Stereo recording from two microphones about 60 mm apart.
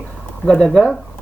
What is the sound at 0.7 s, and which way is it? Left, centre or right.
Speech, centre.